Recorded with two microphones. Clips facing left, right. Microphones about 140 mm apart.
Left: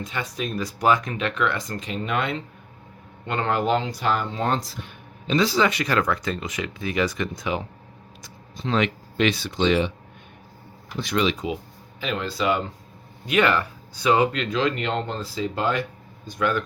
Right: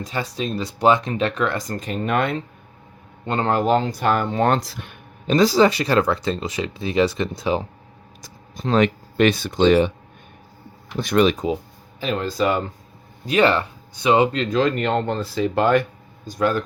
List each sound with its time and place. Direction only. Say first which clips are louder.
0.0 s speech: right 3 dB; 35° right (ahead or behind); by 2.4 s 50° right (ahead or behind)
3.2 s speech: right 4 dB; 35° right (ahead or behind); by 4.9 s 65° right (ahead or behind)
5.3 s speech: right 5 dB; 40° right (ahead or behind)
8.2 s speech: right 3 dB; 40° right (ahead or behind)
10.9 s speech: right 6 dB; 50° right (ahead or behind)
13.2 s speech: right 3 dB; 30° right (ahead or behind)
14.3 s speech: right 4 dB; 45° right (ahead or behind)
16.2 s speech: right 3 dB; 40° right (ahead or behind)